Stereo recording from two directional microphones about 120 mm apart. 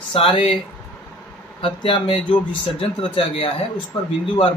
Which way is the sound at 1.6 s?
45° left (ahead or behind).